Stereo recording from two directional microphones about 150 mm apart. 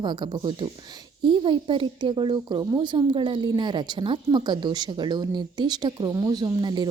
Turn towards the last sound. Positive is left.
turn(degrees=-25)  # may be behind; listen again after turning